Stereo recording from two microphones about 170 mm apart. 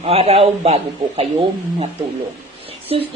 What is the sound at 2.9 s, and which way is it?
Speech, 30° right (ahead or behind).